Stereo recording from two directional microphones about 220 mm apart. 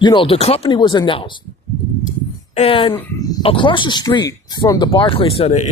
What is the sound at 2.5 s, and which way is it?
Speech, 25° left (ahead or behind).